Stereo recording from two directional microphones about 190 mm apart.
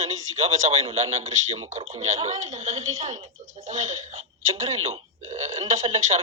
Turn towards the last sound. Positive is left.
turn(degrees=-35)  # may be behind; listen again after turning